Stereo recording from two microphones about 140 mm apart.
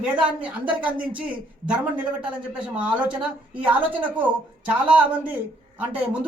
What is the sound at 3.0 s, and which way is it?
Speech, 35° right (ahead or behind).